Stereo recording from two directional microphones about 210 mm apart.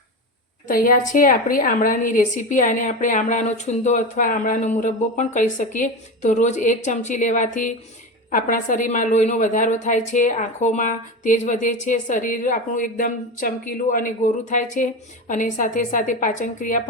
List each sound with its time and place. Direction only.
0.7 s a woman's voice: 40° left (ahead or behind)